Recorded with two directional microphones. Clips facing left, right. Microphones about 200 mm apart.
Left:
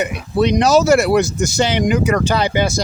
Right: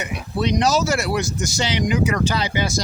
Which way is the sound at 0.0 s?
60° left (ahead or behind).